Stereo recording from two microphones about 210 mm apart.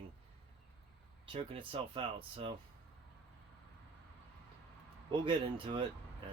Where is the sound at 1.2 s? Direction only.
25° right (ahead or behind).